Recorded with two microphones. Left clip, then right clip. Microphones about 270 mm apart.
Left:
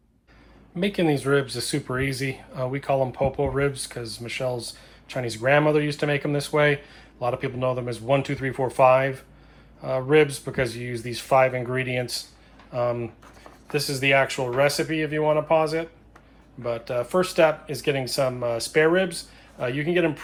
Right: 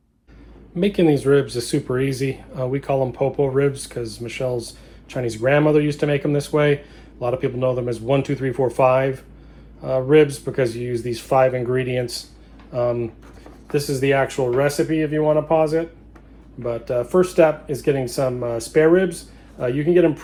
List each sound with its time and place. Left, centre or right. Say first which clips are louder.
0.8 s speech: right 6 dB; centre
17.9 s speech: right 3 dB; centre